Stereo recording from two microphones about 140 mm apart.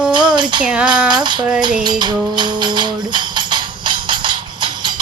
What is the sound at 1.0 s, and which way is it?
Music, 30° right (ahead or behind).